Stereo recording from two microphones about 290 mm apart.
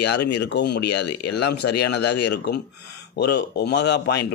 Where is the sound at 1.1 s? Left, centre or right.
Left.